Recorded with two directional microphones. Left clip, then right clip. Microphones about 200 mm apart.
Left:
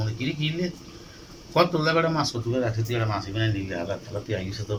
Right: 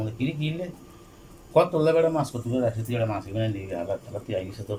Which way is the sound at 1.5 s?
15° right (ahead or behind).